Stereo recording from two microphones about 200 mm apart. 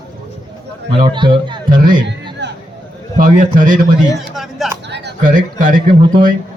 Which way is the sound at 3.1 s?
40° right (ahead or behind).